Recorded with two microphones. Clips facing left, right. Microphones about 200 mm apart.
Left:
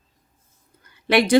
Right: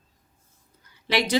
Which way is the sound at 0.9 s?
55° left (ahead or behind).